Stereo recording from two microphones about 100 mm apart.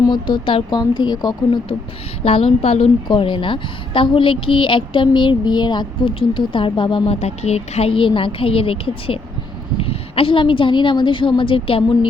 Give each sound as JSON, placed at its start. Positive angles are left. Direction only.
{"t": 0.1, "sound": "a woman's voice", "side_deg": 60}
{"t": 0.7, "sound": "speech", "side_deg": 45}
{"t": 2.2, "sound": "a woman's voice", "side_deg": 75}
{"t": 3.1, "sound": "a woman's voice", "side_deg": 55}
{"t": 7.1, "sound": "a woman's voice", "side_deg": 90}